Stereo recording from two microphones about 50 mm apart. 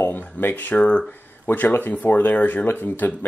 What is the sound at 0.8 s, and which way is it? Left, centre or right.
Speech, left.